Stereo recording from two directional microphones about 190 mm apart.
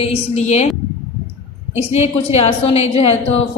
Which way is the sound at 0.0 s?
35° left (ahead or behind).